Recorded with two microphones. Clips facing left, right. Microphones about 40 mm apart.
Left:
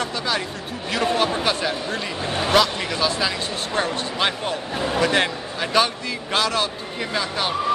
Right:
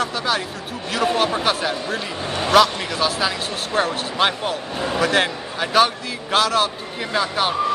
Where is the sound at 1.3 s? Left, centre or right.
Centre.